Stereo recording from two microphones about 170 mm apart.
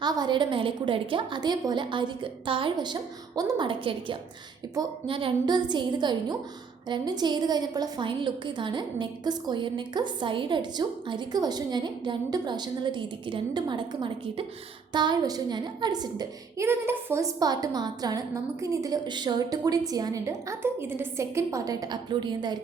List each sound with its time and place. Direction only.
0.0 s a woman's voice: 25° right (ahead or behind)